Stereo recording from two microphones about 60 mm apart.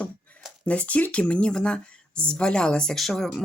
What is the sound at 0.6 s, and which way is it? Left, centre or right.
Speech, left.